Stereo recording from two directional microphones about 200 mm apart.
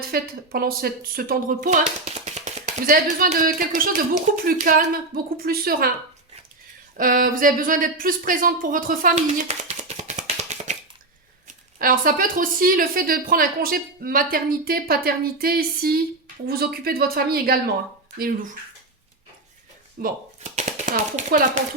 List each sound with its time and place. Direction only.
0.1 s speech: 50° right (ahead or behind)
6.9 s speech: 45° right (ahead or behind)
9.1 s hands: 35° right (ahead or behind)
11.8 s speech: 45° right (ahead or behind)
20.0 s speech: 35° right (ahead or behind)